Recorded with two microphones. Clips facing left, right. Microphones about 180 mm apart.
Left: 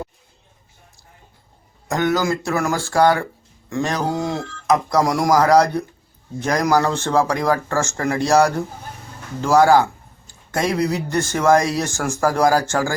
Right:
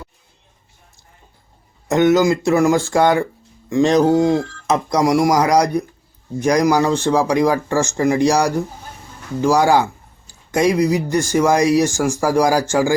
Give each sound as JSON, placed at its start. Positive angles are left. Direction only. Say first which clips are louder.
{"t": 1.9, "sound": "speech", "louder": "right 6 dB", "side_deg": -20}